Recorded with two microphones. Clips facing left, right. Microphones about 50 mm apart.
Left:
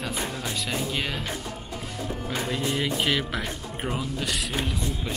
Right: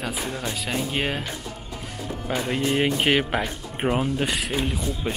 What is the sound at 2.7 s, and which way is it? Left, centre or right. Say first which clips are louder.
Speech: right 6 dB; right.